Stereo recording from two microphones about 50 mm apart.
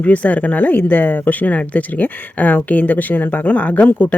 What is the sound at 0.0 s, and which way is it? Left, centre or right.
Speech, left.